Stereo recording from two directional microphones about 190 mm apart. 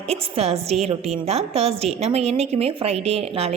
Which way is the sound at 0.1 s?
30° right (ahead or behind).